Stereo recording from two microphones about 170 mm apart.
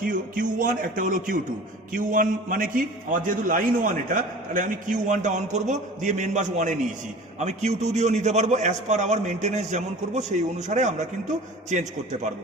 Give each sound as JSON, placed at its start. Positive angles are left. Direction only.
{"t": 0.0, "sound": "a man's voice", "side_deg": -55}